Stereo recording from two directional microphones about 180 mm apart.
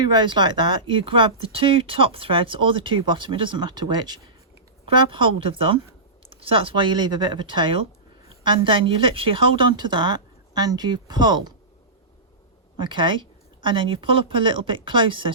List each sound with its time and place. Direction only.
0.0 s speech: 25° right (ahead or behind)
12.7 s speech: 25° right (ahead or behind)